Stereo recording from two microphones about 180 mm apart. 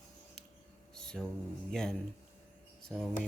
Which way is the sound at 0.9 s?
5° left (ahead or behind).